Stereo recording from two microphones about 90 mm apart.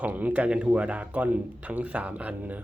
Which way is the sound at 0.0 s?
15° right (ahead or behind).